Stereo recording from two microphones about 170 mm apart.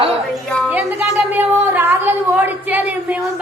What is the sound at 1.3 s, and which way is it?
Speech, 10° right (ahead or behind).